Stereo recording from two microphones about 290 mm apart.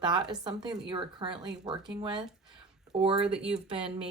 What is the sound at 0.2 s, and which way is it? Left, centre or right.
Speech, centre.